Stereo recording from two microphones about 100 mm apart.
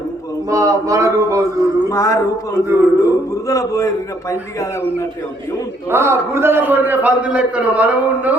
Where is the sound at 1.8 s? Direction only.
35° left (ahead or behind).